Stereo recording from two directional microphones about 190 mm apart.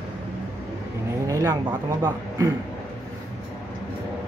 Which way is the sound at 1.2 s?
15° right (ahead or behind).